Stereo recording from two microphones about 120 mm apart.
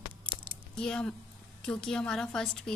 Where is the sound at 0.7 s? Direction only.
5° left (ahead or behind).